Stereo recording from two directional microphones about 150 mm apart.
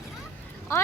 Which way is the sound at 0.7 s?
20° left (ahead or behind).